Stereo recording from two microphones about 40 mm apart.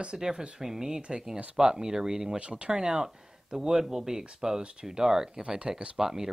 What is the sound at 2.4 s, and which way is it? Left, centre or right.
Speech, right.